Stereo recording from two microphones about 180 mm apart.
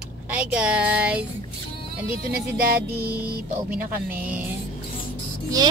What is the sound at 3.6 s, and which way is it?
Speech, 10° right (ahead or behind).